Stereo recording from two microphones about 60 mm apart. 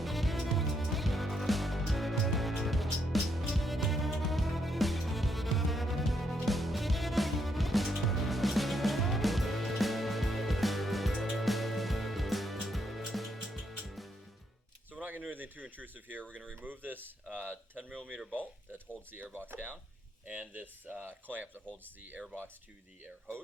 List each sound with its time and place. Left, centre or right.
0.0 s music: centre
14.9 s a sound: right
16.3 s speech: right
17.3 s a sound: right
18.3 s speech: right
20.2 s speech: right